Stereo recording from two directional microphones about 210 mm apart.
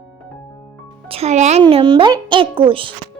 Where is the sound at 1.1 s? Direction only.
30° right (ahead or behind).